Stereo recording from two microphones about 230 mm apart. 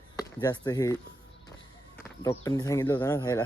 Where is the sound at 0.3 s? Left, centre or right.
Centre.